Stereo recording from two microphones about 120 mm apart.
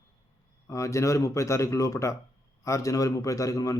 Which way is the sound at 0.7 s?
25° left (ahead or behind).